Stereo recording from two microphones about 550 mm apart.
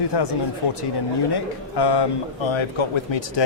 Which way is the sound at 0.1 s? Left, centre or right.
Left.